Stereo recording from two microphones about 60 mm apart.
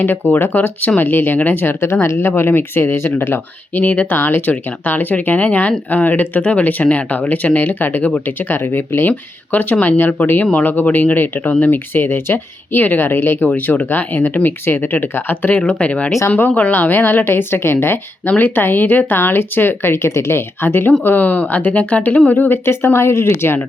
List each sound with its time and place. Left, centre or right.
0.0 s speech: left
1.8 s speech: left
15.5 s speech: centre; by 23.6 s left